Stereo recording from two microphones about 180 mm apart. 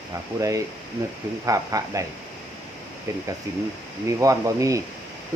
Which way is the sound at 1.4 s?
20° right (ahead or behind).